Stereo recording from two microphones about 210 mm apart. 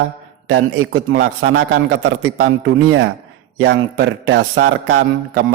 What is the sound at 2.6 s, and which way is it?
A man's voice, 60° right (ahead or behind).